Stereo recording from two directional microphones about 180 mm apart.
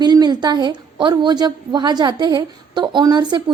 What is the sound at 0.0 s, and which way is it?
A woman's voice, 25° right (ahead or behind).